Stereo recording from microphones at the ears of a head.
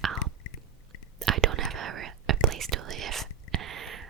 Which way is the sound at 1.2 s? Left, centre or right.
Right.